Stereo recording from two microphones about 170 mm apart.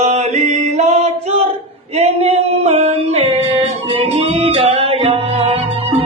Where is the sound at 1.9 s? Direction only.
35° right (ahead or behind).